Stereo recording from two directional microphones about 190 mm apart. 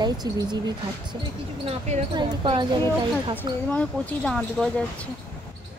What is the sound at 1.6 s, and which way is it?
Speech, 35° right (ahead or behind).